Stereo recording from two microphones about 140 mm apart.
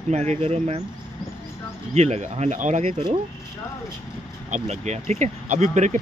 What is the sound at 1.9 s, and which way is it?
Speech, 55° right (ahead or behind).